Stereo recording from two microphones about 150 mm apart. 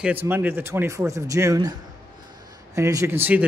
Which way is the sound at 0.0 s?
15° right (ahead or behind).